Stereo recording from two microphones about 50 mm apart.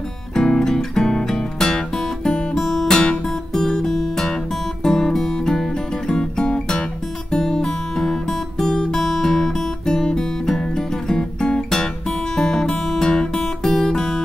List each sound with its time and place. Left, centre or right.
0.3 s music: centre